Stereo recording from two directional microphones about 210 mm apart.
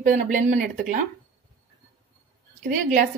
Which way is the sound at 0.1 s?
40° right (ahead or behind).